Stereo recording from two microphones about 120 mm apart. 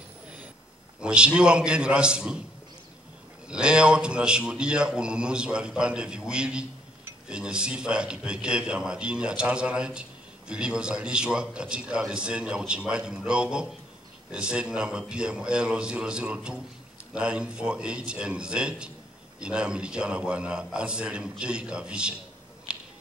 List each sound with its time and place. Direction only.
1.0 s a man's voice: 10° right (ahead or behind)
3.4 s a man's voice: 5° right (ahead or behind)
22.7 s a sound: 5° right (ahead or behind)